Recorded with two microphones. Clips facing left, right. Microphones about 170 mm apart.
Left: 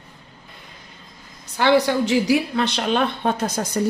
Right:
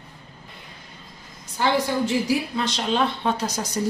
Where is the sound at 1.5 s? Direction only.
75° left (ahead or behind).